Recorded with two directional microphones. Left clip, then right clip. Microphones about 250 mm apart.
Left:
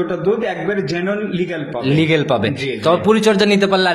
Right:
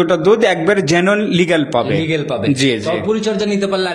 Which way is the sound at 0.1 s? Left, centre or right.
Right.